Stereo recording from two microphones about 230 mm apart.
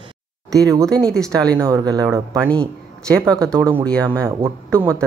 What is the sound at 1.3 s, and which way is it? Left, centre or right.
Speech, centre.